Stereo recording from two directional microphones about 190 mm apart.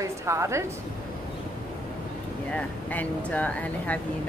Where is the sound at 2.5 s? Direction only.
5° left (ahead or behind).